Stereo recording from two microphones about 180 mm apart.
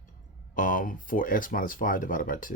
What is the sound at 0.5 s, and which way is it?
Speech, 50° left (ahead or behind).